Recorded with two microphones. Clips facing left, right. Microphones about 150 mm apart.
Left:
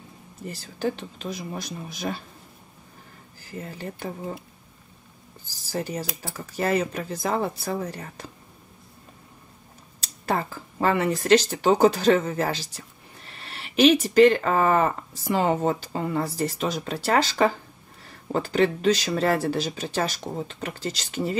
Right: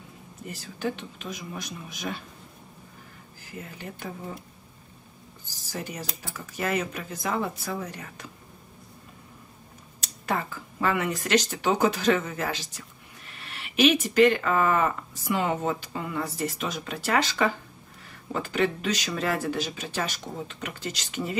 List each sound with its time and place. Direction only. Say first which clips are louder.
0.5 s speech: left 3 dB; 35° left (ahead or behind)
3.5 s speech: left 4 dB; 35° left (ahead or behind)
5.7 s speech: left 6 dB; 35° left (ahead or behind)
10.2 s speech: left 3 dB; 35° left (ahead or behind)